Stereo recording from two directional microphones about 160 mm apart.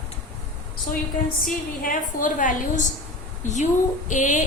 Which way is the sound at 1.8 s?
55° left (ahead or behind).